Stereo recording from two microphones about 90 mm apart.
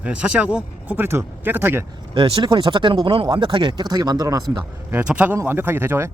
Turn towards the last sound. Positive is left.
turn(degrees=-25)  # may be behind; listen again after turning